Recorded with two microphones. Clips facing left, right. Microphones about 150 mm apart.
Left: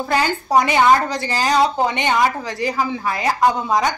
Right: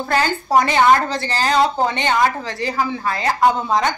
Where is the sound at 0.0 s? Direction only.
15° left (ahead or behind).